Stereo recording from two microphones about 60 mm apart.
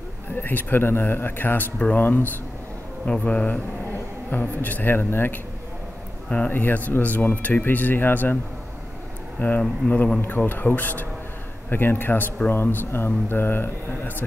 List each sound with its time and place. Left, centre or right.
0.4 s speech: left
1.8 s speech: left
3.1 s speech: left
6.2 s speech: left
9.6 s speech: left
10.2 s speech: left